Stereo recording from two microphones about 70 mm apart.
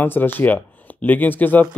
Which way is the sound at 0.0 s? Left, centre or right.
Left.